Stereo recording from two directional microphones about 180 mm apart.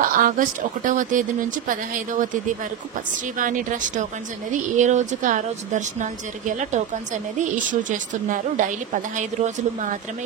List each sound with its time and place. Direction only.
0.0 s a woman's voice: 50° right (ahead or behind)
3.3 s a woman's voice: 45° right (ahead or behind)